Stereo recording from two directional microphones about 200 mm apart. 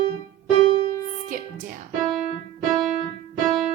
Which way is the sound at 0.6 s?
25° left (ahead or behind).